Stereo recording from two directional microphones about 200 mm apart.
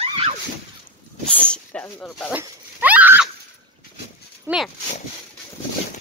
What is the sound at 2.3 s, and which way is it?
Speech, 5° right (ahead or behind).